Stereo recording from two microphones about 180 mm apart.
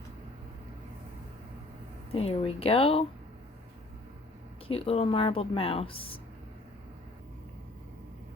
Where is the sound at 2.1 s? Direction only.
35° left (ahead or behind).